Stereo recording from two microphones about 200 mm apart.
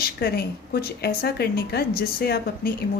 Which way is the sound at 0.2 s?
50° left (ahead or behind).